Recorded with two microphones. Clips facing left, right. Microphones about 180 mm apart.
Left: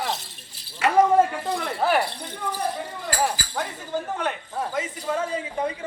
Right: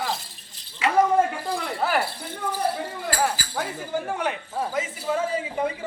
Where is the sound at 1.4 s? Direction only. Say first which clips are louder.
Left 1 dB; centre (ahead or behind).